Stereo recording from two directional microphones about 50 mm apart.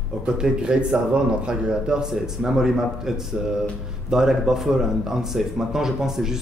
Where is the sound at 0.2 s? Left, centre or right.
Centre.